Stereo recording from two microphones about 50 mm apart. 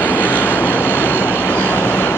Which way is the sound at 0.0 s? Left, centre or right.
Left.